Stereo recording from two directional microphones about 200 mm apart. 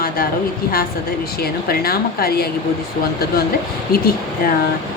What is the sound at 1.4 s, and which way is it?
A woman's voice, 50° left (ahead or behind).